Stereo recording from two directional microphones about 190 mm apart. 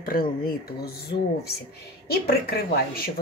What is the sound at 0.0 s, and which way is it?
Speech, 50° left (ahead or behind).